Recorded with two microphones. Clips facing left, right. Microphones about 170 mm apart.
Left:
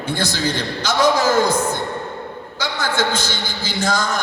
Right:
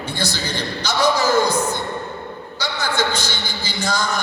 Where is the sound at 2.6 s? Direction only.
50° left (ahead or behind).